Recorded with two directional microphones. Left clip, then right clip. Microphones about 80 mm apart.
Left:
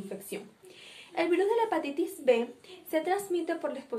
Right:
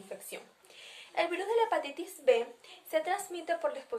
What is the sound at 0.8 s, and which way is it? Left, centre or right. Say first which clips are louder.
A woman's voice: left 3 dB; right.